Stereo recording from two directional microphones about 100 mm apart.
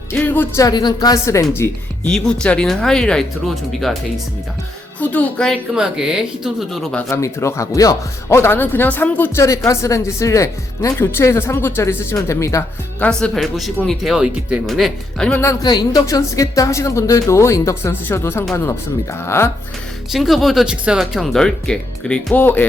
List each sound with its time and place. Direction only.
0.1 s music: 15° left (ahead or behind)
0.7 s speech: 45° left (ahead or behind)
1.2 s speech: 30° left (ahead or behind)
2.0 s speech: 5° left (ahead or behind)
4.9 s speech: 15° left (ahead or behind)
5.7 s speech: 5° right (ahead or behind)
7.1 s speech: 30° left (ahead or behind)
9.6 s speech: 30° left (ahead or behind)
13.0 s speech: 10° left (ahead or behind)
15.3 s speech: 25° left (ahead or behind)
15.6 s a woman's voice: 45° left (ahead or behind); by 19.5 s 25° left (ahead or behind)
20.1 s speech: centre (ahead or behind); by 22.6 s 20° left (ahead or behind)